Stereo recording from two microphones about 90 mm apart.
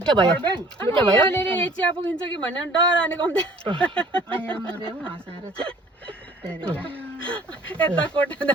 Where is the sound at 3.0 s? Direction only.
15° left (ahead or behind).